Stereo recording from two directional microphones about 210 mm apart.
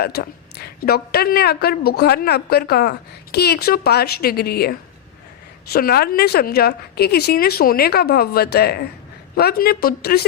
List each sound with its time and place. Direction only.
0.0 s a woman's voice: 50° left (ahead or behind)